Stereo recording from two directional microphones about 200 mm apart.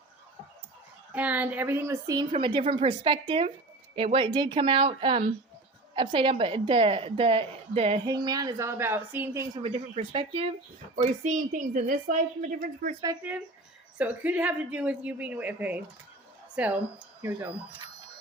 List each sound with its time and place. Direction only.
1.1 s a woman's voice: 5° right (ahead or behind)
2.3 s a woman's voice: 25° right (ahead or behind)
9.7 s a woman's voice: 25° right (ahead or behind)
14.0 s a woman's voice: 10° right (ahead or behind)